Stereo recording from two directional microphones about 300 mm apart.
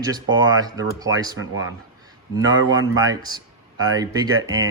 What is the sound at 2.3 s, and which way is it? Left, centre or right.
Speech, centre.